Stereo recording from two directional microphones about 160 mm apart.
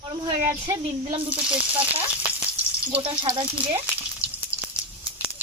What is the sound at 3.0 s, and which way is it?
Speech, 35° right (ahead or behind).